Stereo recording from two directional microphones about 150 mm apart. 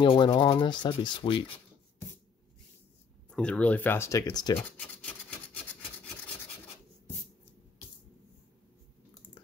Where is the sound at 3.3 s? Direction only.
5° left (ahead or behind); by 4.6 s 25° left (ahead or behind).